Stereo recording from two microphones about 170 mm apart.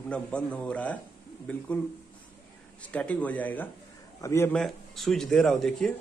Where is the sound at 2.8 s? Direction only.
10° left (ahead or behind).